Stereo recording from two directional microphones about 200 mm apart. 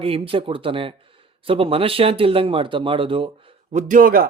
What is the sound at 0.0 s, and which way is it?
Speech, 30° right (ahead or behind).